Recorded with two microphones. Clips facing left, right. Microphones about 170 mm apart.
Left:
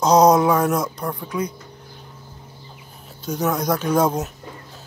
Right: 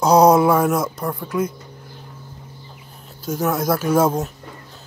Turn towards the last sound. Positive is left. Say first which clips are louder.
# right 2 dB
turn(degrees=-5)  # may be behind; listen again after turning